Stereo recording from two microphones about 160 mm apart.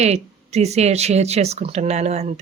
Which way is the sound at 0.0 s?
45° right (ahead or behind).